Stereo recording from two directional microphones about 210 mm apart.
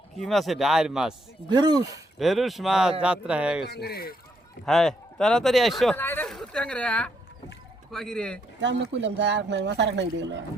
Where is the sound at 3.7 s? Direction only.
50° left (ahead or behind).